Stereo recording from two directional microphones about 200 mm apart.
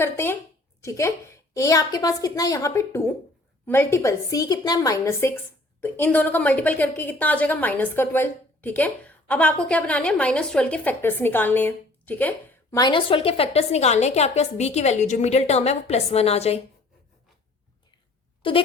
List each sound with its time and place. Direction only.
0.0 s a woman's voice: 10° left (ahead or behind)
12.8 s a woman's voice: 25° left (ahead or behind)
18.4 s speech: 25° left (ahead or behind)